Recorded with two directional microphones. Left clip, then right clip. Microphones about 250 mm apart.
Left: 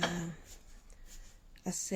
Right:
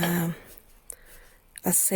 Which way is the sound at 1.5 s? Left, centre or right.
Right.